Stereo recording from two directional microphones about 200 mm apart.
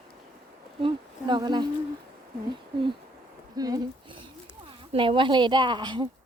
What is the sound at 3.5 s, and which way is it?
Speech, 20° right (ahead or behind).